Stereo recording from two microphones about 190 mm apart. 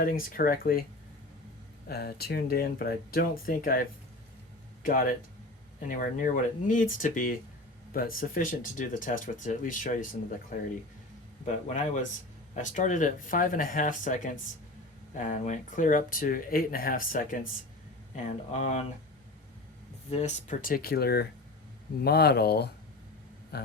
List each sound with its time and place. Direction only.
0.0 s speech: 50° left (ahead or behind)
1.9 s speech: 55° left (ahead or behind)
4.9 s speech: 45° left (ahead or behind)
11.4 s speech: 40° left (ahead or behind)
20.1 s speech: 35° left (ahead or behind); by 22.7 s 55° left (ahead or behind)
23.5 s a sound: 60° left (ahead or behind)